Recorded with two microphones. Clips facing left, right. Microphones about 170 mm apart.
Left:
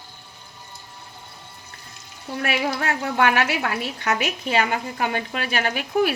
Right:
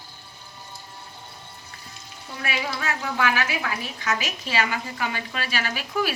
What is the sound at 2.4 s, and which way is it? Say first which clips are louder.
A woman's voice: left 5 dB; 60° left (ahead or behind).